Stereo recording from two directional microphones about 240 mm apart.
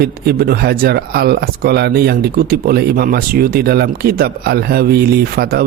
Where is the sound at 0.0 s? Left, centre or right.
Right.